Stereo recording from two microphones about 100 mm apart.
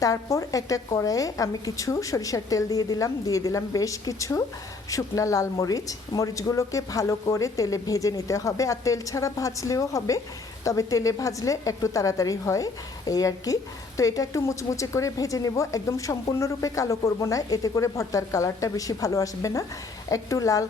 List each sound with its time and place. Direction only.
0.0 s a woman's voice: 35° left (ahead or behind)